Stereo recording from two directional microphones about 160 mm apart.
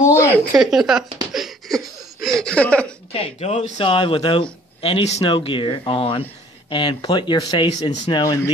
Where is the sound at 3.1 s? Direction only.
40° left (ahead or behind).